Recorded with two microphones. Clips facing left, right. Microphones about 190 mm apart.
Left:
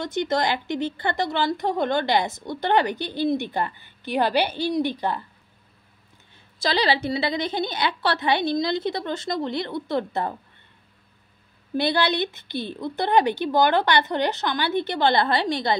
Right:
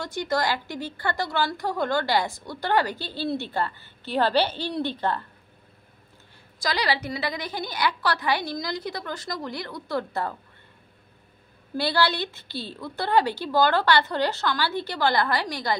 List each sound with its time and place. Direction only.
0.0 s speech: 20° left (ahead or behind)
6.6 s speech: 30° left (ahead or behind)
11.7 s speech: 20° left (ahead or behind)